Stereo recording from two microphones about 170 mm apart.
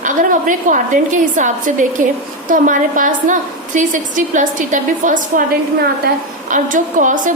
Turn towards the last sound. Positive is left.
turn(degrees=-50)  # may be behind; listen again after turning